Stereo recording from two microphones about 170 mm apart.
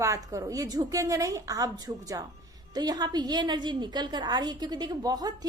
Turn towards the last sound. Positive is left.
turn(degrees=-20)  # may be behind; listen again after turning